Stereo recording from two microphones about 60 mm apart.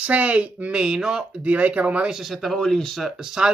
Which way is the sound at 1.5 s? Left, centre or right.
Right.